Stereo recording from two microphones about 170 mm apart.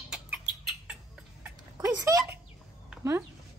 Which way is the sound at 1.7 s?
20° right (ahead or behind).